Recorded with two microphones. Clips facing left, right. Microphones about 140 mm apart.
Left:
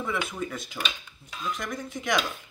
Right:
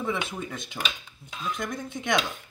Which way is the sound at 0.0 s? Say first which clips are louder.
Even; 20° right (ahead or behind).